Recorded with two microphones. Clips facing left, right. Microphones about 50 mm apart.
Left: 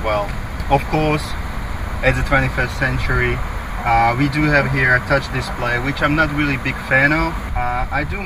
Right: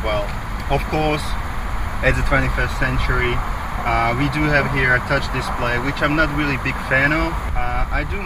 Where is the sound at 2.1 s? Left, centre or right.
Left.